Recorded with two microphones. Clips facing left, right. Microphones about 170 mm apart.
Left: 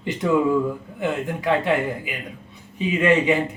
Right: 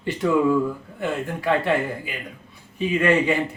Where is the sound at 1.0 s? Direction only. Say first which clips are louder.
Left 1 dB; 20° left (ahead or behind).